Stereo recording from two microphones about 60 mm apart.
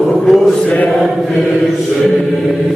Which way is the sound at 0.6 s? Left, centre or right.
Left.